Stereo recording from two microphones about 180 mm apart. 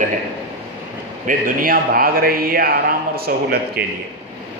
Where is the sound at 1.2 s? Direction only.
50° right (ahead or behind).